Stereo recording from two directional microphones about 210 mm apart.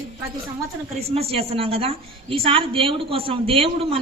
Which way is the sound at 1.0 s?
30° right (ahead or behind).